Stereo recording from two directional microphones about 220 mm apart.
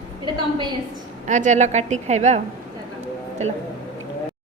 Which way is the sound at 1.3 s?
35° right (ahead or behind).